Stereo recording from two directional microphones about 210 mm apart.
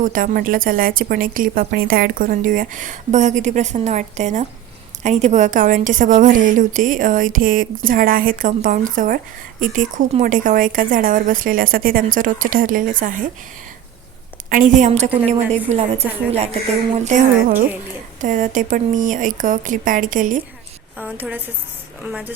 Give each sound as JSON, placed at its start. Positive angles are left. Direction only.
{"t": 0.0, "sound": "a woman's voice", "side_deg": -40}
{"t": 14.5, "sound": "a woman's voice", "side_deg": -40}
{"t": 21.0, "sound": "a woman's voice", "side_deg": -10}